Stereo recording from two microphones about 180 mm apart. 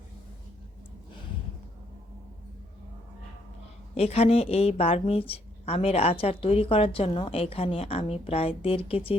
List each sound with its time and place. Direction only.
3.9 s speech: 35° left (ahead or behind)